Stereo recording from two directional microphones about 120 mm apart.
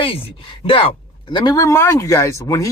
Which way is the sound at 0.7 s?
45° left (ahead or behind).